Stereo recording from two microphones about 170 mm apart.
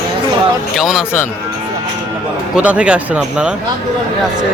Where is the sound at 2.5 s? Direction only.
5° right (ahead or behind).